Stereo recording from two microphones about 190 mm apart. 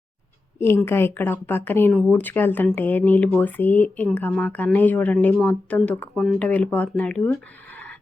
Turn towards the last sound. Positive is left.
turn(degrees=10)  # may be behind; listen again after turning